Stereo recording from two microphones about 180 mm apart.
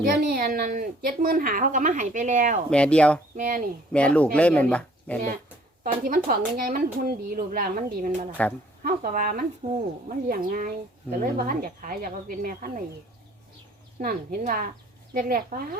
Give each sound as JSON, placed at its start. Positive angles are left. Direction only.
{"t": 0.0, "sound": "a woman's voice", "side_deg": -55}
{"t": 2.6, "sound": "speech", "side_deg": 5}
{"t": 3.3, "sound": "a woman's voice", "side_deg": -50}
{"t": 3.9, "sound": "speech", "side_deg": 5}
{"t": 5.8, "sound": "a woman's voice", "side_deg": -50}
{"t": 14.0, "sound": "a woman's voice", "side_deg": -55}